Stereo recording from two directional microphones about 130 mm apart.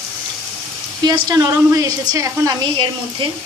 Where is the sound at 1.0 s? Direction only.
30° right (ahead or behind).